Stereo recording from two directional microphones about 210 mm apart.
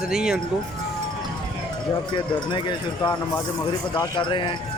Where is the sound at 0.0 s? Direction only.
5° right (ahead or behind).